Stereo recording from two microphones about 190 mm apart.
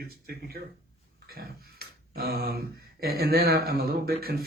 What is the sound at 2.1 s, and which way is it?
Speech, 55° right (ahead or behind).